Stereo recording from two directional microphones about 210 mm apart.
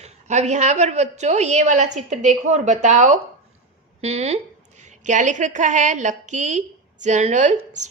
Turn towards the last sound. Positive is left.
turn(degrees=-35)  # may be behind; listen again after turning